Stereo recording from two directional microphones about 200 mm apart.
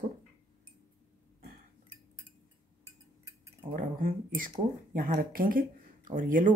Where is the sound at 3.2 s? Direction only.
15° right (ahead or behind).